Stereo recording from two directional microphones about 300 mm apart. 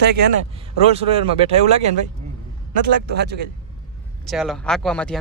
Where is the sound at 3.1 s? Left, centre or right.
Right.